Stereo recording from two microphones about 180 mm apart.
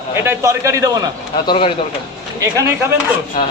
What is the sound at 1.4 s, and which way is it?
Speech, 30° left (ahead or behind).